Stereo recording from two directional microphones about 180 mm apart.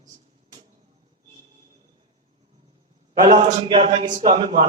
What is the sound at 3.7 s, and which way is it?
Speech, 35° right (ahead or behind).